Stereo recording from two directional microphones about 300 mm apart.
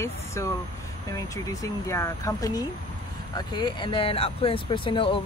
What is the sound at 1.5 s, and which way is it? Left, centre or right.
Speech, centre.